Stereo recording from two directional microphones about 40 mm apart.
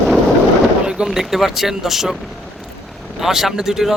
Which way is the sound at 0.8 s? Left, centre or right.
Right.